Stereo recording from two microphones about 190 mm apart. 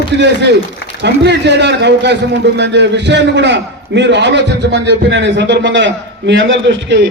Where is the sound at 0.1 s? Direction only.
65° right (ahead or behind).